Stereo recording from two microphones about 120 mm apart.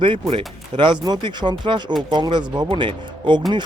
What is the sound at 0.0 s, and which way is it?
Speech, 50° right (ahead or behind).